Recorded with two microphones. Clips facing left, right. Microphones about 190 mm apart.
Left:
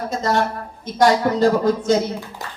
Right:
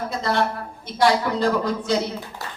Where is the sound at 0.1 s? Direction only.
45° left (ahead or behind).